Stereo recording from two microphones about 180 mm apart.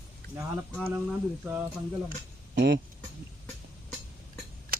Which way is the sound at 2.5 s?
65° right (ahead or behind).